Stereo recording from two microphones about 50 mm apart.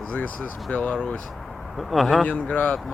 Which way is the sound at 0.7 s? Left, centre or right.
Left.